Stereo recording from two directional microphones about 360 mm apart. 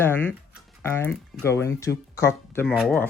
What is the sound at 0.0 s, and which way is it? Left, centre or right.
Speech, centre.